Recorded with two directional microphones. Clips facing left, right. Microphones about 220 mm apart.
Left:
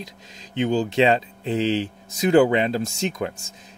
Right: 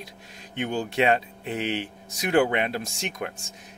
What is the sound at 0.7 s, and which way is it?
Speech, 90° left.